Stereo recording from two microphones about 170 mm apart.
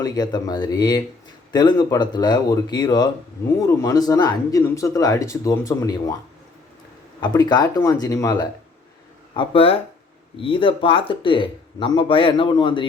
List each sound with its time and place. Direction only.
0.0 s speech: 25° left (ahead or behind)
7.2 s speech: 25° left (ahead or behind)
9.3 s speech: 30° left (ahead or behind)